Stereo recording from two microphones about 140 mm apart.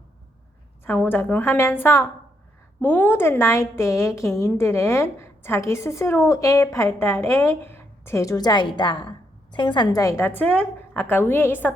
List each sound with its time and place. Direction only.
0.9 s a woman's voice: 15° left (ahead or behind)